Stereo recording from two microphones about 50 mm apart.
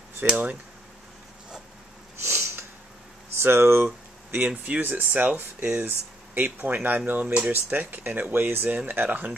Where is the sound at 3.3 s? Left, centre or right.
Right.